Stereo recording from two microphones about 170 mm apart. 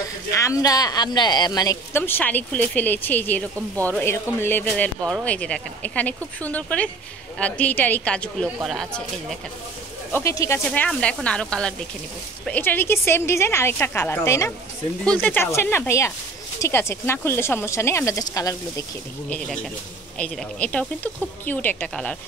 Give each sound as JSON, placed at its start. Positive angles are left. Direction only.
{"t": 0.3, "sound": "speech", "side_deg": 20}
{"t": 10.1, "sound": "speech", "side_deg": 20}
{"t": 10.7, "sound": "speech", "side_deg": 5}
{"t": 19.2, "sound": "speech", "side_deg": 5}